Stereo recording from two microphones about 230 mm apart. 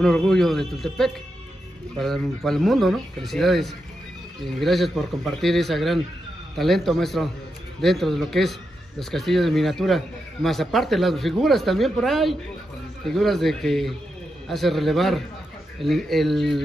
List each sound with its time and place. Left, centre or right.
0.0 s speech: centre